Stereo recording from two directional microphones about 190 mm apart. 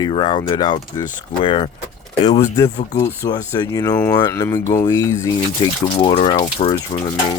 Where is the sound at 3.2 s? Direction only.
20° left (ahead or behind).